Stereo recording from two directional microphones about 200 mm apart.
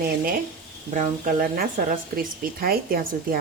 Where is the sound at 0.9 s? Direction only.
40° right (ahead or behind).